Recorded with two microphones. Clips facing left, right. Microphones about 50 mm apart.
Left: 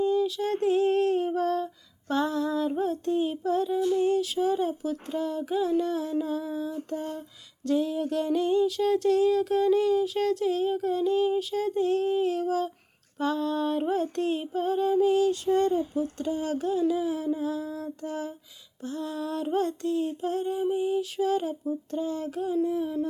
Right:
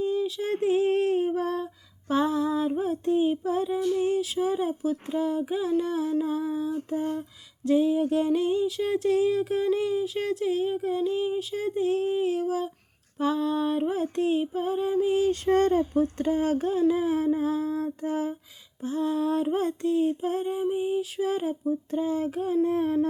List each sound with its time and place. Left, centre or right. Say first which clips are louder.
0.0 s a sound: left 2 dB; centre
15.3 s speech: right 2 dB; right
16.1 s speech: right 4 dB; right
17.2 s female singing: right 4 dB; right
22.6 s speech: right 3 dB; right